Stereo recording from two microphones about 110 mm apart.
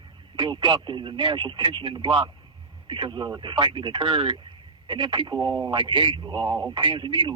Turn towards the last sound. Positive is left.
turn(degrees=-45)  # may be behind; listen again after turning